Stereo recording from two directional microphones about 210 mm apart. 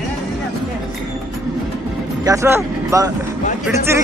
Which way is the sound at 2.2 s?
15° right (ahead or behind).